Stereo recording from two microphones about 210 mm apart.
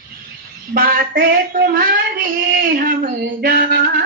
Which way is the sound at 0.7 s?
45° right (ahead or behind).